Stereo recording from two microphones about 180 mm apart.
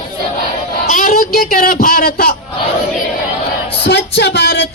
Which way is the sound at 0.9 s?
45° left (ahead or behind).